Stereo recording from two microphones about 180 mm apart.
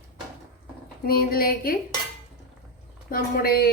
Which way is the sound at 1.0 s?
55° left (ahead or behind).